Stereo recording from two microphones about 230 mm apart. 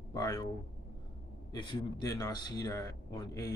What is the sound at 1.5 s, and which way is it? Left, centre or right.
Speech, centre.